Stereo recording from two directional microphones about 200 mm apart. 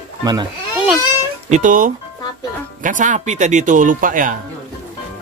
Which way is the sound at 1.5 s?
40° right (ahead or behind).